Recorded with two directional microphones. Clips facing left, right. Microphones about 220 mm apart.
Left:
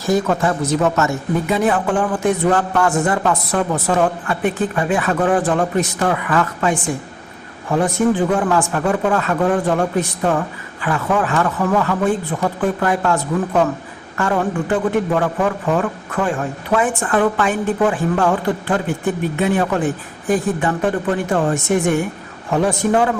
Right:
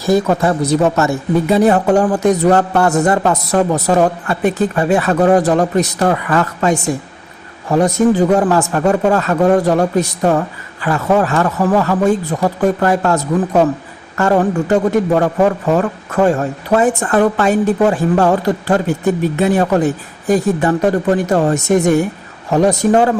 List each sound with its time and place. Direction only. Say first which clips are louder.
0.3 s a man's voice: right 4 dB; 35° right (ahead or behind)